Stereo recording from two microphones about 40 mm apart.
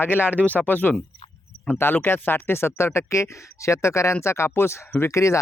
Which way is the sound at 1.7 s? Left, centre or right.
Left.